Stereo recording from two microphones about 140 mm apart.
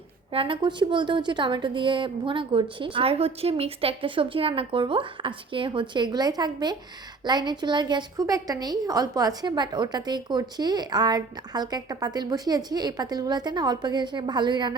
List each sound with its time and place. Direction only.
0.3 s a woman's voice: 40° right (ahead or behind)